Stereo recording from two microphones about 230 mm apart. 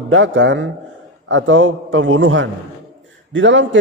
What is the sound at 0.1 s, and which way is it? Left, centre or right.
A man's voice, right.